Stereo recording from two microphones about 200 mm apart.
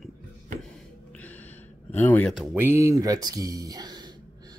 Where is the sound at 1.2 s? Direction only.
10° left (ahead or behind).